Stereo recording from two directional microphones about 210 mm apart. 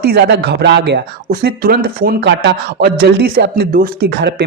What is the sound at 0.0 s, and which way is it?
Speech, 50° right (ahead or behind).